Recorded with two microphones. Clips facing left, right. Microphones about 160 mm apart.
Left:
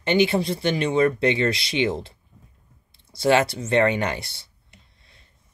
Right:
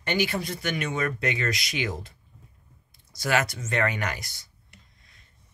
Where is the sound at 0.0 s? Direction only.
25° left (ahead or behind).